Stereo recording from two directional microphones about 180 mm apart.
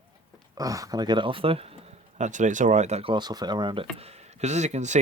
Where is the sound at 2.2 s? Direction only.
45° right (ahead or behind).